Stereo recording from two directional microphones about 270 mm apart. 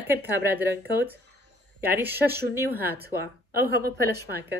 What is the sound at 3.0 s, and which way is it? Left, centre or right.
Speech, right.